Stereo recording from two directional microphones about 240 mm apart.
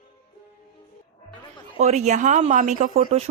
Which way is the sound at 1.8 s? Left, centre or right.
Right.